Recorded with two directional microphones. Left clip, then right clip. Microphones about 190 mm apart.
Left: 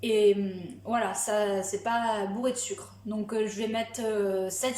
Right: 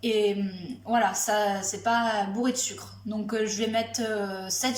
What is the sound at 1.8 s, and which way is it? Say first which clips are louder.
A woman's voice: right 5 dB; 20° left (ahead or behind).